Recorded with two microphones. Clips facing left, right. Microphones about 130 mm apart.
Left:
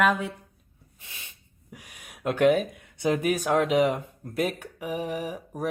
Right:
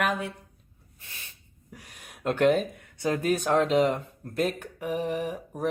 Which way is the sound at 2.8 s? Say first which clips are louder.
Left 2 dB; 15° left (ahead or behind).